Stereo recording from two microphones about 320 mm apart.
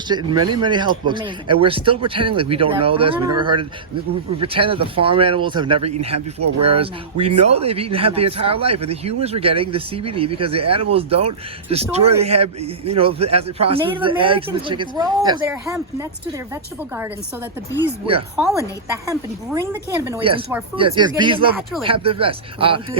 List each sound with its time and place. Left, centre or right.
0.3 s speech: centre
19.0 s speech: centre